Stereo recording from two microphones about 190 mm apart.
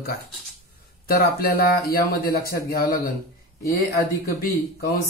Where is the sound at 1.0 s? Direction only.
50° left (ahead or behind).